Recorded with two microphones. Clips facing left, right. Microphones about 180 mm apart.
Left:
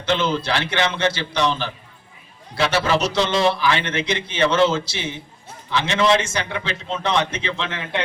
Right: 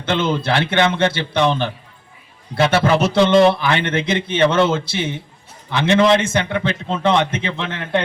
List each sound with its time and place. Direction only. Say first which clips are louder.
0.0 s a man's voice: right 2 dB; 55° right (ahead or behind)